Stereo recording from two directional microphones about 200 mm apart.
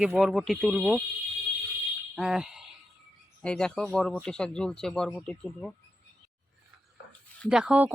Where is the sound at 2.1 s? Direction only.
Centre (ahead or behind).